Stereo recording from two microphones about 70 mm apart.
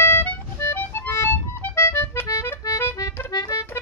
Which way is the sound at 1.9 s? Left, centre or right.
Left.